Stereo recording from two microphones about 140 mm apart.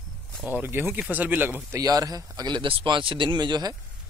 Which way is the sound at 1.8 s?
25° right (ahead or behind).